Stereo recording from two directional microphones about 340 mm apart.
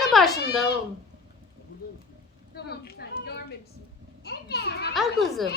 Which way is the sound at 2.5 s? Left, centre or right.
Left.